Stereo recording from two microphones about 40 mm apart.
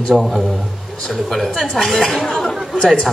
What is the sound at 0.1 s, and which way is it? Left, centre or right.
Speech, centre.